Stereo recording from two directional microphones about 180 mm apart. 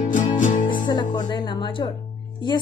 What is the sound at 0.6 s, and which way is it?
Music, 25° left (ahead or behind).